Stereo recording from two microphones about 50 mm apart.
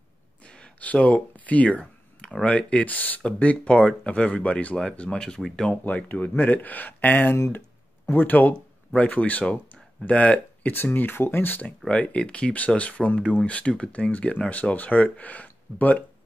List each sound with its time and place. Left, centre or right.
0.5 s a sound: left
2.4 s speech: left
5.9 s speech: left
10.6 s speech: left
11.9 s speech: left